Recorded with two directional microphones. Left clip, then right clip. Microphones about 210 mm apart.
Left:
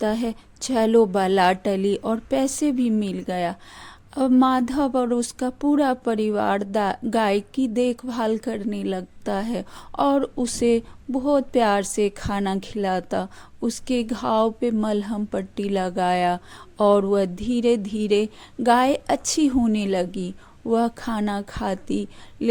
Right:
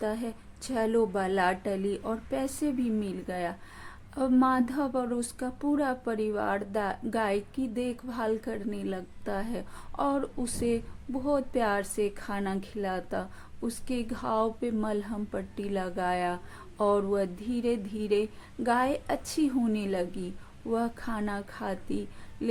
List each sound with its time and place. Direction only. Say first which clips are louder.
0.0 s a woman's voice: left 8 dB; 40° left (ahead or behind)